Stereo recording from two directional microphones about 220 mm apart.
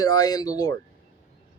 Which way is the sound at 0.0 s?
15° left (ahead or behind).